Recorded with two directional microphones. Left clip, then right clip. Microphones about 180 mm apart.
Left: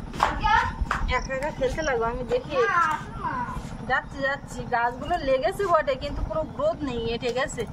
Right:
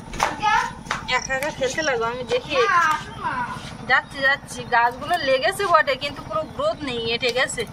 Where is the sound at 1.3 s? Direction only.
5° right (ahead or behind).